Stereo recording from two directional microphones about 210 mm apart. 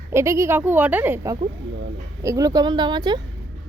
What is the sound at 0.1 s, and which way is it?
A woman's voice, 15° right (ahead or behind).